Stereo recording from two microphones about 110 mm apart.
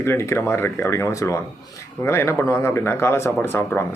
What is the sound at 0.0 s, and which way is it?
Speech, 25° left (ahead or behind).